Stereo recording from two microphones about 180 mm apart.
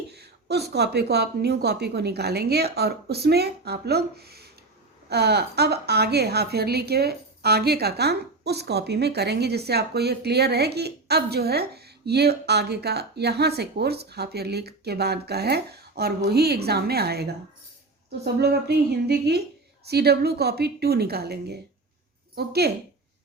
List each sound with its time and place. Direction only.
0.1 s a woman's voice: 65° right (ahead or behind)
18.3 s a woman's voice: 65° right (ahead or behind)